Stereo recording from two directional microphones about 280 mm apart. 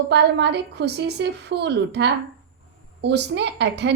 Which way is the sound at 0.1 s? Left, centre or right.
Right.